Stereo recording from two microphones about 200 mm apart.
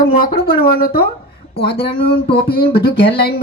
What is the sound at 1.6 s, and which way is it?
Speech, 25° left (ahead or behind).